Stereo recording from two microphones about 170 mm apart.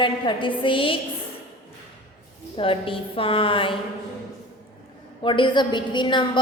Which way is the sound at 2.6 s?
30° left (ahead or behind).